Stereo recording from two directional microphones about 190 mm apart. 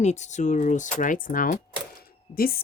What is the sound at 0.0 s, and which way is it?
Speech, 35° left (ahead or behind).